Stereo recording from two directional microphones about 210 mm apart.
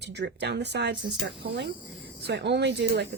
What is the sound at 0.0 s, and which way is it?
Speech, 55° right (ahead or behind).